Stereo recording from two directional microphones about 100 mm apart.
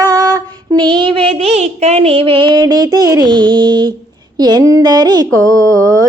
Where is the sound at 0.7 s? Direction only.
50° right (ahead or behind).